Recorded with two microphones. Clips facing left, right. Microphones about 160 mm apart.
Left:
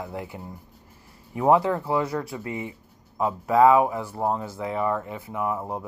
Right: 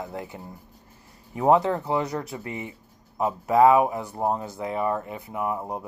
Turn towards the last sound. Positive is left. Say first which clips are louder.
# left 1 dB
turn(degrees=-20)  # may be behind; listen again after turning